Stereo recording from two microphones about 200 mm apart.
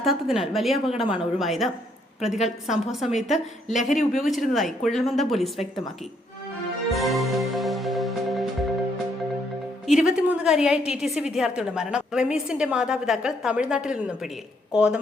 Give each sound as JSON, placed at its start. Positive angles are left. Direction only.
{"t": 0.0, "sound": "a woman's voice", "side_deg": 0}
{"t": 3.7, "sound": "speech", "side_deg": 35}
{"t": 4.1, "sound": "a woman's voice", "side_deg": 0}
{"t": 6.9, "sound": "music", "side_deg": 0}
{"t": 10.0, "sound": "a woman's voice", "side_deg": -5}